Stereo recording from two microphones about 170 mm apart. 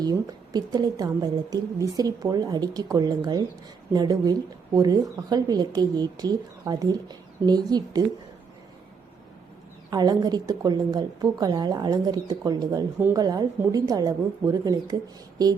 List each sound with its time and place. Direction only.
0.0 s speech: 25° right (ahead or behind)
9.9 s speech: 25° right (ahead or behind)
13.0 s speech: 10° right (ahead or behind)
13.2 s speech: 25° right (ahead or behind)